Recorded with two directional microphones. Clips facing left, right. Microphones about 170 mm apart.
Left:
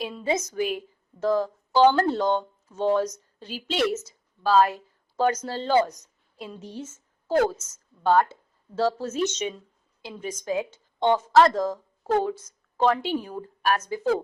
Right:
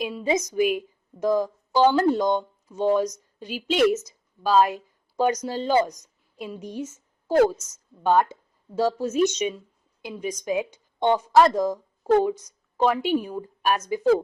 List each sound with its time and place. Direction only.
0.0 s a woman's voice: 15° right (ahead or behind)